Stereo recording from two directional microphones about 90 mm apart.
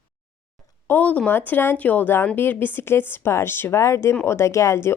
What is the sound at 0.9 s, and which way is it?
Speech, 15° left (ahead or behind).